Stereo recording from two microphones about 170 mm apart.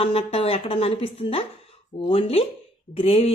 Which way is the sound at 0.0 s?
35° left (ahead or behind).